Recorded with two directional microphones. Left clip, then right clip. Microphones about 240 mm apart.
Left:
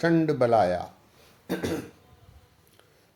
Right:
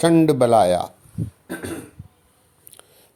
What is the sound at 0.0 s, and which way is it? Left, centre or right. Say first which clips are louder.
Speech: right 7 dB; right.